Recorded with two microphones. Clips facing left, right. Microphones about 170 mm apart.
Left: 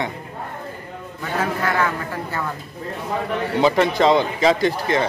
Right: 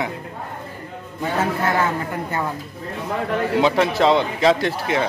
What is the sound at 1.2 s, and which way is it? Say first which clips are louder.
A man's voice: right 2 dB; 25° right (ahead or behind).